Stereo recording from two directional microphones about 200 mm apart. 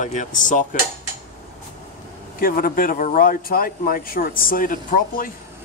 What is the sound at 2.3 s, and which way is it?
Speech, 45° left (ahead or behind).